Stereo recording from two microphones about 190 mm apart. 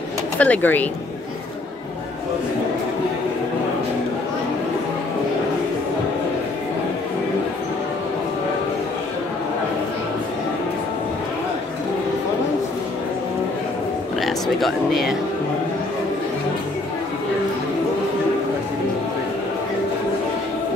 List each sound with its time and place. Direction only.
0.4 s speech: 10° left (ahead or behind)
14.2 s speech: centre (ahead or behind)